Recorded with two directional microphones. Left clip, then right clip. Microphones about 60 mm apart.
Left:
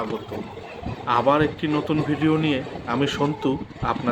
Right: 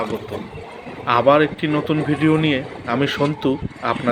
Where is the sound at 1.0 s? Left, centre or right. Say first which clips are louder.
Right 5 dB; right.